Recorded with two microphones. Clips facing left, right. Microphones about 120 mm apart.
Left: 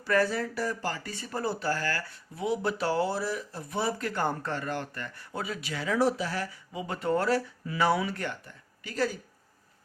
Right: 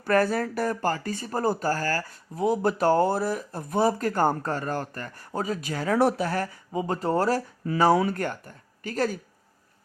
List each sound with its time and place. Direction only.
0.0 s speech: 50° right (ahead or behind)